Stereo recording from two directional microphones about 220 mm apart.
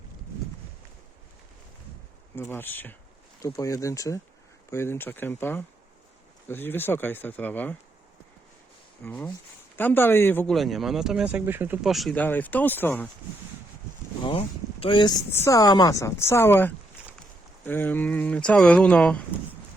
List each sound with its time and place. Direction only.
2.3 s speech: 10° left (ahead or behind)
9.0 s speech: 10° left (ahead or behind)
14.2 s speech: 25° left (ahead or behind); by 19.2 s 5° left (ahead or behind)